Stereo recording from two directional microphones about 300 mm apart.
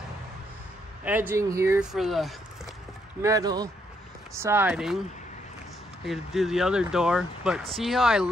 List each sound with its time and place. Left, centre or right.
1.0 s speech: centre
3.2 s speech: centre
6.0 s speech: centre